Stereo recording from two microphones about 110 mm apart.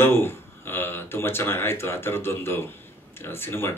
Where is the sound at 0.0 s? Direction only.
20° left (ahead or behind).